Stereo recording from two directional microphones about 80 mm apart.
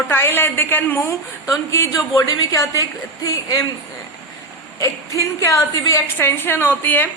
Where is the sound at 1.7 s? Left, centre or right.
Left.